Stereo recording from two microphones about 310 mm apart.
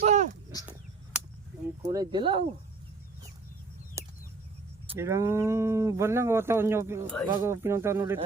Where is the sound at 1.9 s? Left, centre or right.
Centre.